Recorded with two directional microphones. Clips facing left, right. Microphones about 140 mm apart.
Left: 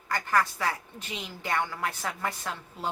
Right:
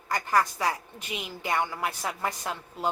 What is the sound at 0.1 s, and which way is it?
A woman's voice, 20° right (ahead or behind).